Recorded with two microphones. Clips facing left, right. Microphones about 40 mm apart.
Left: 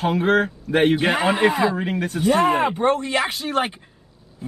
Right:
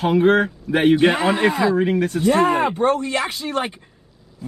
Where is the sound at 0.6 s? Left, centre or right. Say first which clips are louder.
Right 1 dB; centre.